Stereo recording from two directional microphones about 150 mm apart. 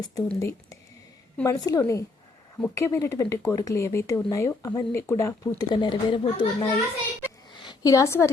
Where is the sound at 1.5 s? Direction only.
25° left (ahead or behind).